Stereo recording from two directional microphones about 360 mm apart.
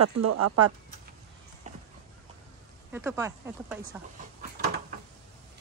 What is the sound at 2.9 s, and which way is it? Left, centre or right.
Speech, centre.